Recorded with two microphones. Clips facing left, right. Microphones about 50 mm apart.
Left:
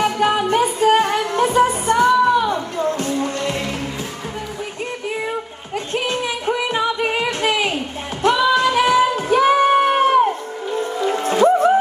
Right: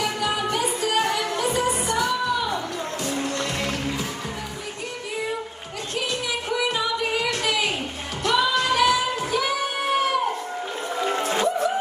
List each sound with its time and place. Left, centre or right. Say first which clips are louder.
0.0 s music: left 7 dB; left
5.9 s music: left 4 dB; left
8.2 s singing: left 6 dB; left
11.2 s music: left 12 dB; left